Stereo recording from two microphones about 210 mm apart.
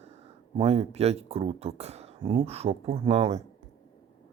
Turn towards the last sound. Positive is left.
turn(degrees=-30)  # may be behind; listen again after turning